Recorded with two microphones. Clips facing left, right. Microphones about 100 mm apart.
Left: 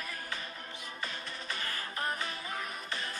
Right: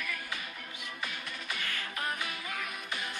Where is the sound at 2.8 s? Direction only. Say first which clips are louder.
Even; 10° right (ahead or behind).